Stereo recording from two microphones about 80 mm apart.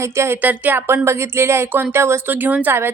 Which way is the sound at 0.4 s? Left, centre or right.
Right.